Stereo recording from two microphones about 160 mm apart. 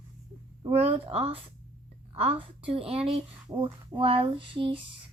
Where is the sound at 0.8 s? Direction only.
40° right (ahead or behind).